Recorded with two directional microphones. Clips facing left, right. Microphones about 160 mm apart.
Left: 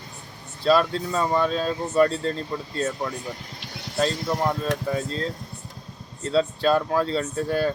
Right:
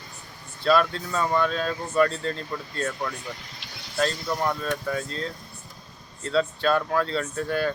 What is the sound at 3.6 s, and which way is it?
Vehicle, 60° left (ahead or behind).